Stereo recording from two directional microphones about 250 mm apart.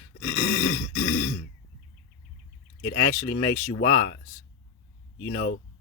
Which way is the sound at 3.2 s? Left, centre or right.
Left.